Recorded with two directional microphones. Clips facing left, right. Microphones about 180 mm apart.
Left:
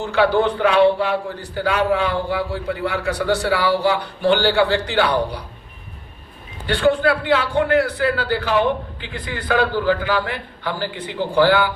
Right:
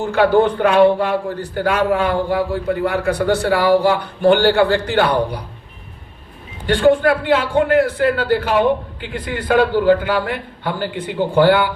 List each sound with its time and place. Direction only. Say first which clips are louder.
0.0 s a man's voice: right 3 dB; 50° right (ahead or behind)
6.7 s a man's voice: right 4 dB; 45° right (ahead or behind)